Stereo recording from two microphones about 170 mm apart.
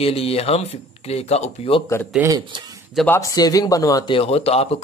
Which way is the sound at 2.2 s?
20° right (ahead or behind).